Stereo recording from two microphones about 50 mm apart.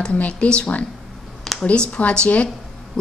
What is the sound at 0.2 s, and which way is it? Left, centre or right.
A woman's voice, left.